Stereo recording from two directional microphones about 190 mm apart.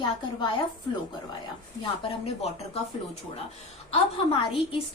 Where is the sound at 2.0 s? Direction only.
30° left (ahead or behind).